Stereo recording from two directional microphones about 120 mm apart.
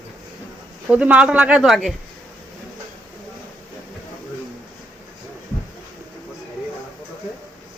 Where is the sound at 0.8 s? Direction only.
10° right (ahead or behind).